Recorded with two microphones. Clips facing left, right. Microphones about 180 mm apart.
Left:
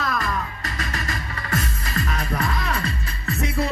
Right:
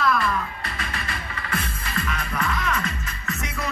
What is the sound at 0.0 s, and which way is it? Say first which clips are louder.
Music: right 4 dB; 40° left (ahead or behind).